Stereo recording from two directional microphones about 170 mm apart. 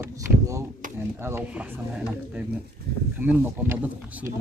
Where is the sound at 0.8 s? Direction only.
50° right (ahead or behind).